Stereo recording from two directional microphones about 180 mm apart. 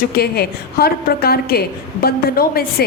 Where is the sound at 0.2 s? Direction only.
60° left (ahead or behind).